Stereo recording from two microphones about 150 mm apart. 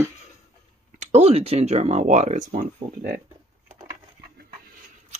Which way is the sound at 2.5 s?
75° right (ahead or behind).